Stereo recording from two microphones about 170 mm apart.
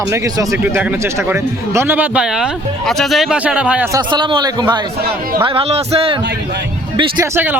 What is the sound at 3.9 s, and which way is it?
A man's voice, 25° right (ahead or behind).